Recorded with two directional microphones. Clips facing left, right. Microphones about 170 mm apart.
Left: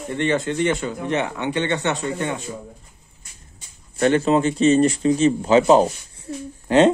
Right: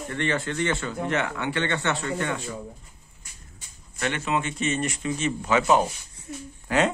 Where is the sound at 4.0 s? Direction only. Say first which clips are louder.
Left 10 dB; 35° left (ahead or behind).